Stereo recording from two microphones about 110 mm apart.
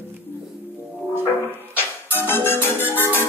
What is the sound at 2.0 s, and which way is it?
Music, 20° left (ahead or behind).